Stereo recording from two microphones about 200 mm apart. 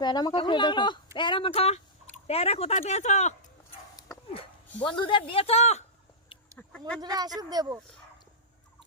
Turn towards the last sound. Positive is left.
turn(degrees=-15)  # may be behind; listen again after turning